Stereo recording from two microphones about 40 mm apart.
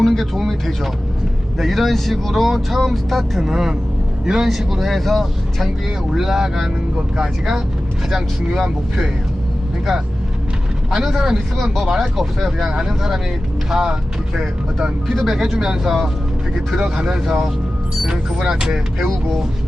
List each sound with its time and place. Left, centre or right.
0.0 s speech: centre
1.5 s speech: centre
3.4 s speech: centre
6.1 s speech: centre
8.1 s speech: centre
10.9 s speech: centre
12.6 s speech: centre
15.0 s speech: centre
15.3 s speech: centre
17.2 s speech: centre